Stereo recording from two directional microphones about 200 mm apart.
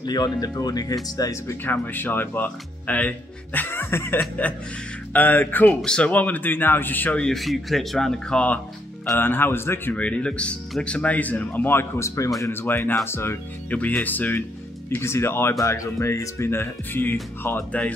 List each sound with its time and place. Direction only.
0.0 s speech: 20° left (ahead or behind)